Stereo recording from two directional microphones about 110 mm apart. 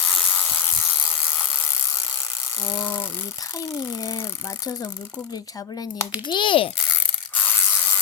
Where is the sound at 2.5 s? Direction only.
20° left (ahead or behind).